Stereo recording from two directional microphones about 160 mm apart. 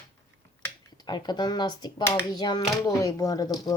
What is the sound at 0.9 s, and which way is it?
Speech, 25° left (ahead or behind).